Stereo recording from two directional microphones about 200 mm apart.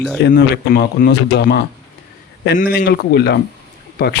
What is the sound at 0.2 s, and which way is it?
Speech, 55° left (ahead or behind).